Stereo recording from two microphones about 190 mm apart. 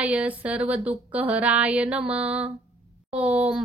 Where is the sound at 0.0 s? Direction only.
5° right (ahead or behind).